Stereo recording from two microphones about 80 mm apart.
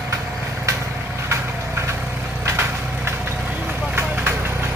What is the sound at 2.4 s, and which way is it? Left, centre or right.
Vehicle, right.